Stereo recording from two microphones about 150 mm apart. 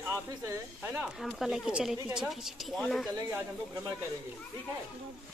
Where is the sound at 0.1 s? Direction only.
20° right (ahead or behind); by 3.1 s centre (ahead or behind).